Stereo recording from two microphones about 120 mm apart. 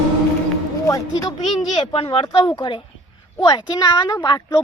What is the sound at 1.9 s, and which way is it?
Speech, 50° left (ahead or behind).